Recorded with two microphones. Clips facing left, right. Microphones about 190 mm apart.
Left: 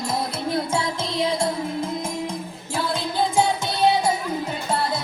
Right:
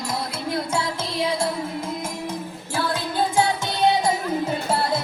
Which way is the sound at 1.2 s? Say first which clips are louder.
Left 1 dB; centre (ahead or behind).